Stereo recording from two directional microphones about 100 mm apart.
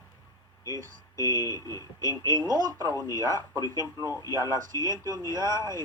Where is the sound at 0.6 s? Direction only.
35° left (ahead or behind).